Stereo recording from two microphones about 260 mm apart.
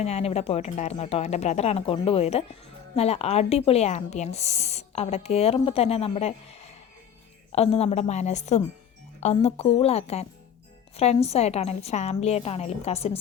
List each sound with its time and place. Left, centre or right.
0.0 s speech: left
7.5 s speech: left